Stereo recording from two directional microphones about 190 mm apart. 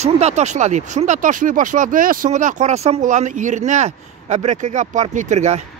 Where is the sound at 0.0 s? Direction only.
35° right (ahead or behind).